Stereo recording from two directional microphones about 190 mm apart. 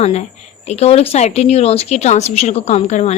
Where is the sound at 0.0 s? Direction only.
35° left (ahead or behind).